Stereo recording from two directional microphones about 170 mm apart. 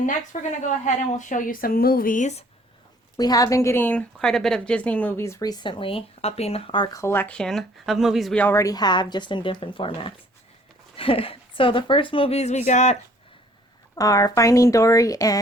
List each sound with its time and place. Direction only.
0.3 s speech: 45° left (ahead or behind)
3.2 s a woman's voice: 20° left (ahead or behind); by 13.0 s 45° left (ahead or behind)
13.9 s a woman's voice: 20° left (ahead or behind)